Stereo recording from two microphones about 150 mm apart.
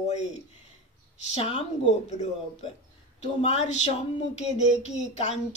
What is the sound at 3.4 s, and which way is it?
Speech, 50° left (ahead or behind).